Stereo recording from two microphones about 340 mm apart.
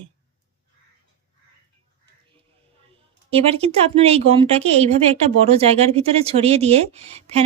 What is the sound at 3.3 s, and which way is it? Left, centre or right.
A woman's voice, centre.